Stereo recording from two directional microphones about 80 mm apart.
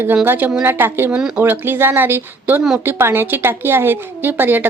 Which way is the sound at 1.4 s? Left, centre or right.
Right.